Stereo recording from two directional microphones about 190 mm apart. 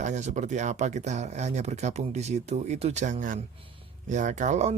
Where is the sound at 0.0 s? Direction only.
40° right (ahead or behind).